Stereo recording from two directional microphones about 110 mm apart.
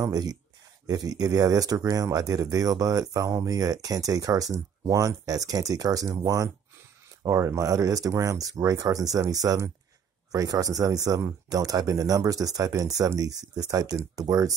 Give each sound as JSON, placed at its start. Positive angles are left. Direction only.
{"t": 0.0, "sound": "speech", "side_deg": -35}